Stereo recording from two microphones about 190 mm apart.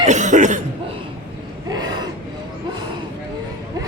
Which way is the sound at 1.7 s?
20° right (ahead or behind).